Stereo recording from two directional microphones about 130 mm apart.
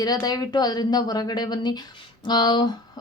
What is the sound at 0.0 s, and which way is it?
Speech, 30° left (ahead or behind).